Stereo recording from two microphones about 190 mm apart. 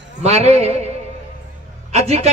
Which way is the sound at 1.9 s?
35° right (ahead or behind).